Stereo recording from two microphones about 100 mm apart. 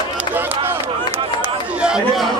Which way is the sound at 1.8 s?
5° right (ahead or behind).